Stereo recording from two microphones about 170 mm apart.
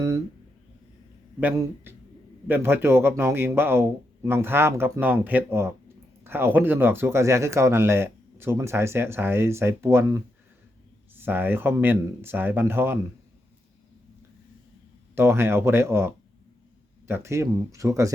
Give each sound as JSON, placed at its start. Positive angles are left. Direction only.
{"t": 1.4, "sound": "speech", "side_deg": -10}
{"t": 15.1, "sound": "speech", "side_deg": -15}